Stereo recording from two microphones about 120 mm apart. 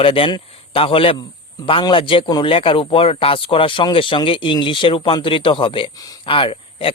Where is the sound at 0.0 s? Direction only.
45° left (ahead or behind).